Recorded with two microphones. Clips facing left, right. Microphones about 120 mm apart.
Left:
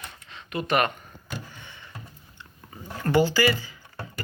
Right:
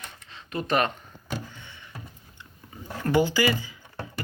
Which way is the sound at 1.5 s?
15° left (ahead or behind).